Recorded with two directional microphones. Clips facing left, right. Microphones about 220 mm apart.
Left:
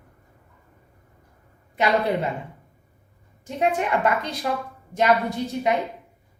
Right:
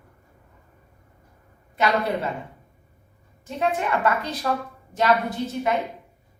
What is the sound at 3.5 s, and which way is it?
Speech, 20° left (ahead or behind).